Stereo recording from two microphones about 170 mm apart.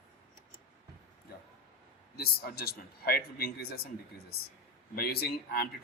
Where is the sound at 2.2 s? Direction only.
65° left (ahead or behind).